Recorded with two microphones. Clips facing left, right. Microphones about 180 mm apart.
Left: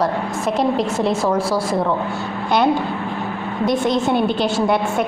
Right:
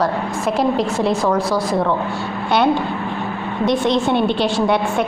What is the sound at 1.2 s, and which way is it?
Speech, 25° left (ahead or behind).